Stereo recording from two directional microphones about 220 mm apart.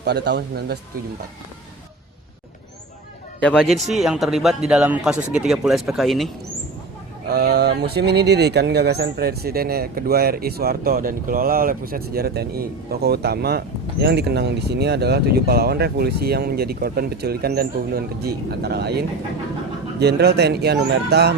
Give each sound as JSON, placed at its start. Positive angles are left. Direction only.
{"t": 0.0, "sound": "speech", "side_deg": -50}
{"t": 3.4, "sound": "speech", "side_deg": 5}
{"t": 7.3, "sound": "speech", "side_deg": -45}